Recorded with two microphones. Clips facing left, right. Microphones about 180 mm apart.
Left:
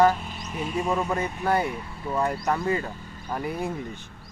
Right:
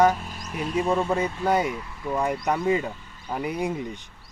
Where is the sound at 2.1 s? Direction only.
15° right (ahead or behind).